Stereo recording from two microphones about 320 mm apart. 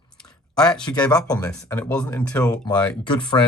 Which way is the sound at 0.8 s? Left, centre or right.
Centre.